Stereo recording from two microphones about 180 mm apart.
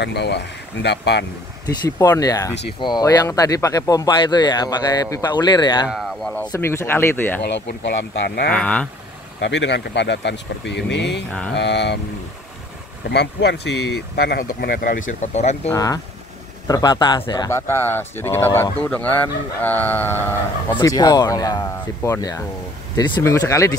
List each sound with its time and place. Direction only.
0.0 s speech: 70° left (ahead or behind)
1.9 s speech: 20° left (ahead or behind)
5.9 s speech: centre (ahead or behind)
6.4 s speech: 15° left (ahead or behind)
7.4 s speech: 75° left (ahead or behind)
8.5 s speech: 5° left (ahead or behind)
9.4 s speech: 80° left
13.1 s speech: 70° left (ahead or behind); by 15.7 s 40° left (ahead or behind)
15.7 s speech: 20° left (ahead or behind)